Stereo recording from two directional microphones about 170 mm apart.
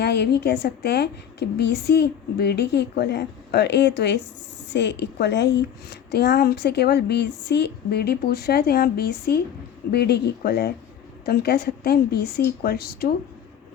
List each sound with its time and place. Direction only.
0.0 s a woman's voice: 75° left (ahead or behind)